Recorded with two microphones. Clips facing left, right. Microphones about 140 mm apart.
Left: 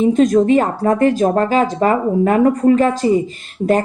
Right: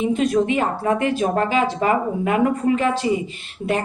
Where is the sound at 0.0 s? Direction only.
40° left (ahead or behind).